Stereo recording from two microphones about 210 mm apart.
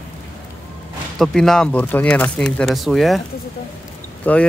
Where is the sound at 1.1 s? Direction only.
Centre (ahead or behind).